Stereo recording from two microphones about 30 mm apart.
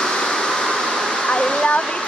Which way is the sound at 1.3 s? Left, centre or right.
Left.